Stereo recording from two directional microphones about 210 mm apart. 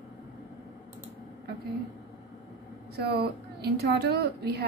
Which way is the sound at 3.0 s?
50° right (ahead or behind).